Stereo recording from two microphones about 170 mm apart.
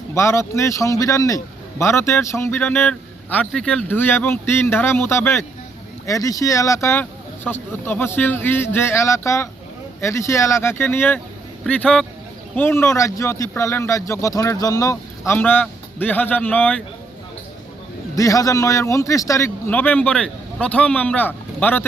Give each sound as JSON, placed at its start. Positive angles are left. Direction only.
{"t": 0.1, "sound": "a man's voice", "side_deg": 15}
{"t": 18.2, "sound": "a man's voice", "side_deg": 20}